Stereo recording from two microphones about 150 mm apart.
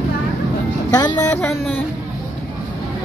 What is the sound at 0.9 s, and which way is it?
Music, 30° left (ahead or behind).